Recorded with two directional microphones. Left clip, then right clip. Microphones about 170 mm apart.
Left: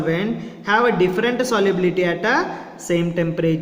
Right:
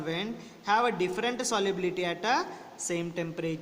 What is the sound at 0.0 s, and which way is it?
Speech, 40° right (ahead or behind).